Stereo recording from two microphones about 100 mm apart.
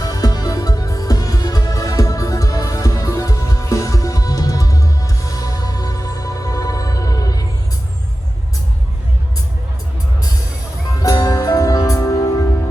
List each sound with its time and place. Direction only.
0.0 s music: 40° left (ahead or behind)
11.0 s music: 35° left (ahead or behind)